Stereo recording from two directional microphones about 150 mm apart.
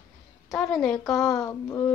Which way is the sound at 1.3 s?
20° left (ahead or behind).